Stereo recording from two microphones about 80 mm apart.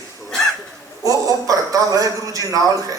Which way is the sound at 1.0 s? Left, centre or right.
Right.